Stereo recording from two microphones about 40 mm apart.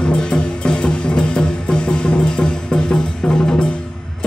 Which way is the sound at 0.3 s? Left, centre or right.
Left.